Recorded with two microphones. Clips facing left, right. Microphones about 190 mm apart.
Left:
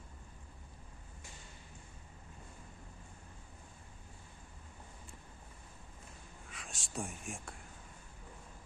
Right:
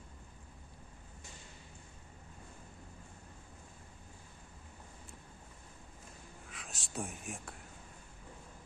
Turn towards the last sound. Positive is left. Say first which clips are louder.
# even
turn(degrees=0)  # may be behind; listen again after turning